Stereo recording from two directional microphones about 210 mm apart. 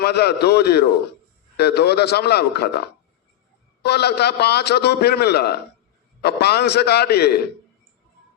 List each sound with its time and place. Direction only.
0.0 s a man's voice: 50° left (ahead or behind)